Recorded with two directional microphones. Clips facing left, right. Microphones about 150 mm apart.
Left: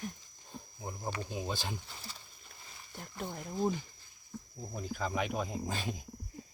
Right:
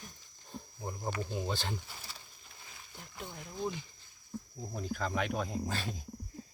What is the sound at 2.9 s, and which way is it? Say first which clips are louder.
Speech: left 5 dB; 50° left (ahead or behind).